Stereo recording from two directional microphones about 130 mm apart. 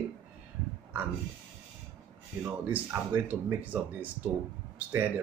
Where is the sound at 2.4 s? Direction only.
15° right (ahead or behind).